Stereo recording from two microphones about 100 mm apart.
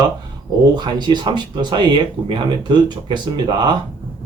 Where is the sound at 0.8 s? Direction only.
45° right (ahead or behind).